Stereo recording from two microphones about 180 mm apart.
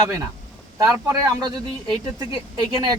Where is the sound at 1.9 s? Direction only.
20° right (ahead or behind).